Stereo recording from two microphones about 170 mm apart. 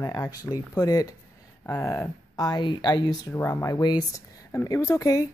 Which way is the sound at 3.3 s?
15° left (ahead or behind).